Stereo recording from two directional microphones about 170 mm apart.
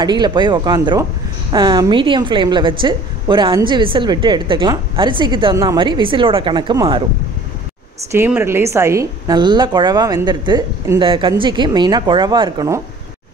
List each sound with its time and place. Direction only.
0.0 s a woman's voice: 25° right (ahead or behind)
8.1 s a woman's voice: 15° right (ahead or behind)